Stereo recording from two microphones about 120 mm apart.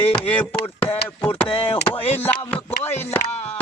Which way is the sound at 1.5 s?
45° left (ahead or behind).